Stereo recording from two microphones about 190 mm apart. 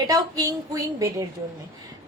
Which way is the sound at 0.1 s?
20° right (ahead or behind).